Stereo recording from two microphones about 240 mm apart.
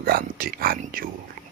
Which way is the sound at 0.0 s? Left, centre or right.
Right.